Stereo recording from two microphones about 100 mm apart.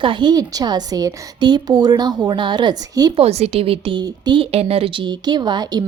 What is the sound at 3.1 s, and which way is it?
Speech, 90° right.